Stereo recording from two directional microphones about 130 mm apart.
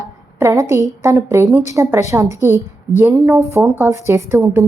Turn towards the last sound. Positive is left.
turn(degrees=-20)  # may be behind; listen again after turning